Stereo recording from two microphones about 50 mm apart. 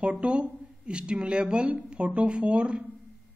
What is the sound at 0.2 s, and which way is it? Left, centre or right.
A man's voice, right.